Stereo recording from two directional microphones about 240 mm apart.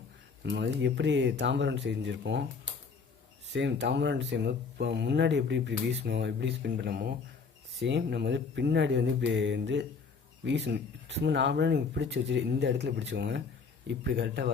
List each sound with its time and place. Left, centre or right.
0.4 s speech: right
3.5 s speech: right